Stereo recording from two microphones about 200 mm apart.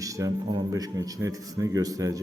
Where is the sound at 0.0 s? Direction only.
15° right (ahead or behind).